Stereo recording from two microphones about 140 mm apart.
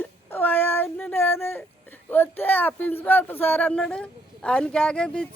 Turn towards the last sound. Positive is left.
turn(degrees=5)  # may be behind; listen again after turning